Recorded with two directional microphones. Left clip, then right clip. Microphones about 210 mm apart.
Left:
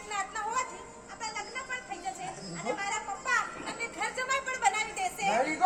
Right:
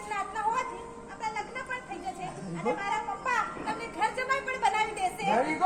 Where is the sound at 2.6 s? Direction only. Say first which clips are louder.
Right 3 dB; 15° left (ahead or behind).